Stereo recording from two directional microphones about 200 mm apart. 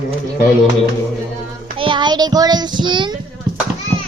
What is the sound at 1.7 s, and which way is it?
A child's voice, 25° right (ahead or behind).